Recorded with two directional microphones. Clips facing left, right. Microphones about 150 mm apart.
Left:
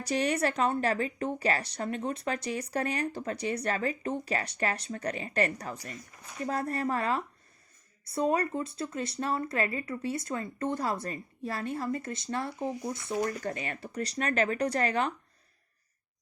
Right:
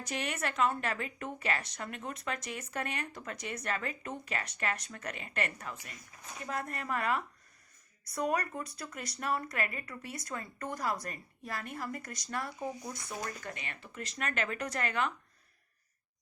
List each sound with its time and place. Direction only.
0.0 s a woman's voice: 35° left (ahead or behind)